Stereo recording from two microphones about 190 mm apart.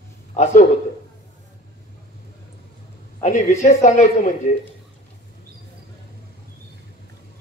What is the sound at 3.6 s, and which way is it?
Speech, 40° left (ahead or behind).